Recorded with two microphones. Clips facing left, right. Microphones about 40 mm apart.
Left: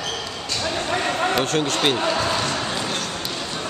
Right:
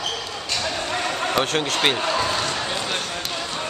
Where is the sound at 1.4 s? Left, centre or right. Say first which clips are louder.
Left 1 dB; centre.